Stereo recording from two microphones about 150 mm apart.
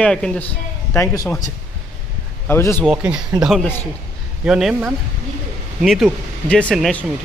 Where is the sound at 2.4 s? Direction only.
15° left (ahead or behind).